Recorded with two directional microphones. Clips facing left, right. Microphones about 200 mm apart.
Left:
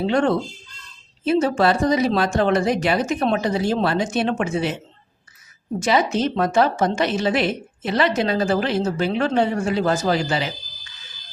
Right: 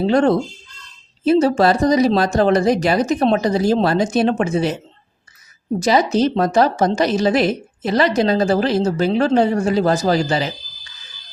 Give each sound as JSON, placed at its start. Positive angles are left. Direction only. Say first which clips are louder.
{"t": 0.1, "sound": "a woman's voice", "louder": "right 5 dB", "side_deg": -40}
{"t": 5.8, "sound": "a woman's voice", "louder": "right 4 dB", "side_deg": -40}